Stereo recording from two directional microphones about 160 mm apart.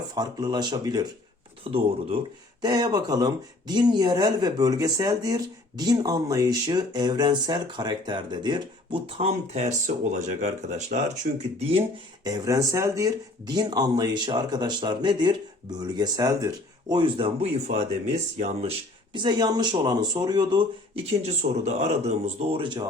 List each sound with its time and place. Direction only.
0.1 s speech: 25° right (ahead or behind)
1.7 s a man's voice: 35° right (ahead or behind)
11.3 s speech: 55° right (ahead or behind)
11.6 s a man's voice: 35° right (ahead or behind)
12.2 s a man's voice: 25° right (ahead or behind); by 18.7 s 45° right (ahead or behind)
19.1 s a man's voice: 25° right (ahead or behind)